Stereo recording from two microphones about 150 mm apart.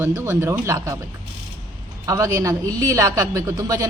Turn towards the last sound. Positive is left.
turn(degrees=-25)  # may be behind; listen again after turning